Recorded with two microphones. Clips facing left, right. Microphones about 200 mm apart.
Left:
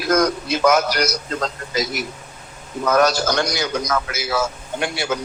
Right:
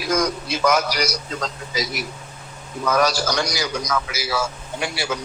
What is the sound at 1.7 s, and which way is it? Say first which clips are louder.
Speech: left 3 dB; 55° left (ahead or behind).